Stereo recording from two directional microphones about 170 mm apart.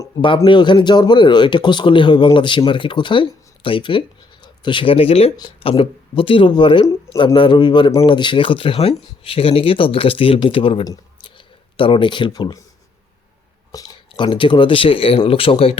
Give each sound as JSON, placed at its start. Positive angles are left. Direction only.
{"t": 0.0, "sound": "speech", "side_deg": 25}
{"t": 13.7, "sound": "speech", "side_deg": 25}